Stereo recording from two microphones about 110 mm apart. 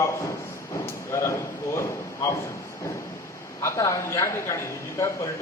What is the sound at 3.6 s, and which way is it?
A woman's voice, 25° left (ahead or behind).